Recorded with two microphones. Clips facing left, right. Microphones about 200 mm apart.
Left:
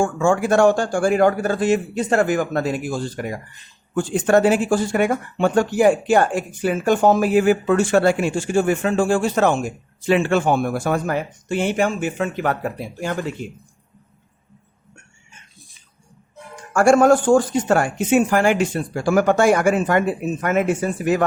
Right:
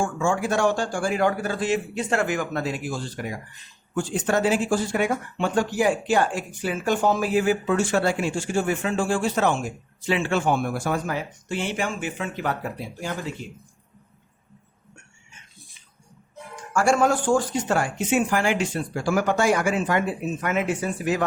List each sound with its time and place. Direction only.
0.0 s speech: 50° left (ahead or behind)
16.7 s speech: 50° left (ahead or behind)